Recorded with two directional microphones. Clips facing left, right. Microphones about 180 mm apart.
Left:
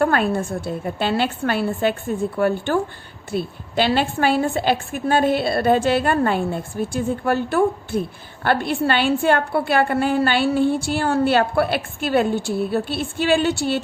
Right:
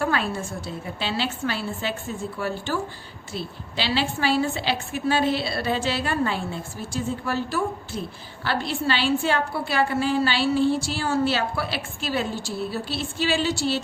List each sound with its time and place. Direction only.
0.0 s a woman's voice: 55° left (ahead or behind)